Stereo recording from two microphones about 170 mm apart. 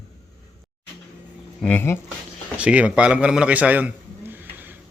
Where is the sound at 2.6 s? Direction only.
5° right (ahead or behind).